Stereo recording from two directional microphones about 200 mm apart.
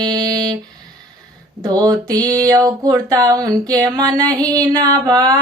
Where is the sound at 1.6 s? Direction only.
20° right (ahead or behind).